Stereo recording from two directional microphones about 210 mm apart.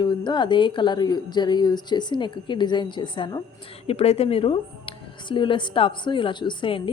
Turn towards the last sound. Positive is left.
turn(degrees=25)  # may be behind; listen again after turning